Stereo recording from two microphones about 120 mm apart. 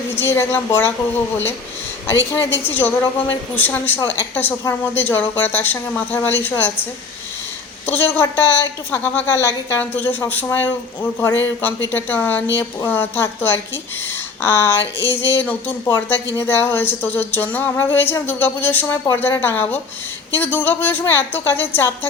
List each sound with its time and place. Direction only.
0.2 s speech: 20° left (ahead or behind)
2.0 s a woman's voice: 20° left (ahead or behind)
7.9 s a woman's voice: 15° left (ahead or behind)